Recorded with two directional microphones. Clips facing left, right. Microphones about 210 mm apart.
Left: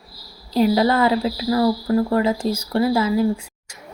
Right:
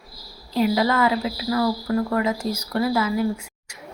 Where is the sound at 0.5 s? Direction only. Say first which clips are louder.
Left 3 dB; 35° left (ahead or behind).